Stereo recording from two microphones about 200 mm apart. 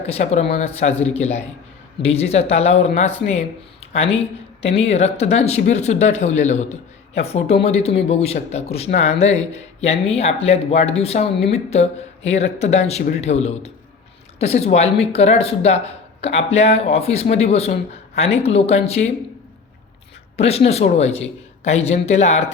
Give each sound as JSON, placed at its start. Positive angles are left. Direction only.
{"t": 0.1, "sound": "speech", "side_deg": 35}
{"t": 20.5, "sound": "speech", "side_deg": 30}